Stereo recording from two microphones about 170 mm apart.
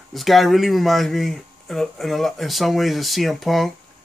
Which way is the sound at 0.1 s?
Centre (ahead or behind).